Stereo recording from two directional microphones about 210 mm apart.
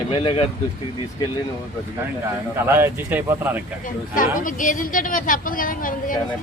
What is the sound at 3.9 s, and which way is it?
Speech, 40° left (ahead or behind).